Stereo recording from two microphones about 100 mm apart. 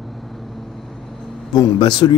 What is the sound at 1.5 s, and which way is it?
Speech, 45° left (ahead or behind).